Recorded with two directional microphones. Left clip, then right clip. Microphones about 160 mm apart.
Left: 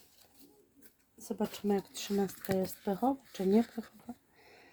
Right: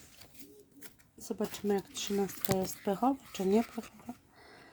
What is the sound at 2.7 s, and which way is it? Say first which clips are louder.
Speech: right 2 dB; 25° right (ahead or behind).